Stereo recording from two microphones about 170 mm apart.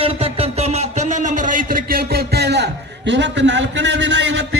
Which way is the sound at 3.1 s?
90° right.